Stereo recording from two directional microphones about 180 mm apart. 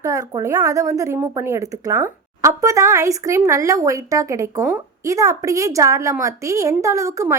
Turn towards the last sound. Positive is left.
turn(degrees=-15)  # may be behind; listen again after turning